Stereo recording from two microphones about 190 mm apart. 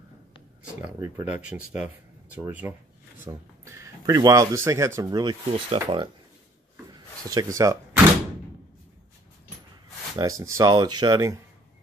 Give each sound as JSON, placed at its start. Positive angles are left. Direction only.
{"t": 0.7, "sound": "speech", "side_deg": -15}
{"t": 6.9, "sound": "vehicle", "side_deg": -20}
{"t": 10.1, "sound": "speech", "side_deg": -15}